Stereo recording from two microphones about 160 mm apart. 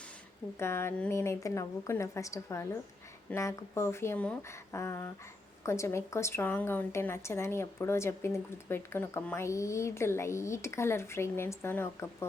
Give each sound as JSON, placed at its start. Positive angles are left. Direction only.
{"t": 0.6, "sound": "a woman's voice", "side_deg": 15}